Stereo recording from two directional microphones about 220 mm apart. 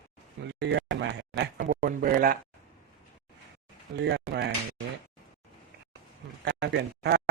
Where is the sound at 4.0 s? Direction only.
50° right (ahead or behind).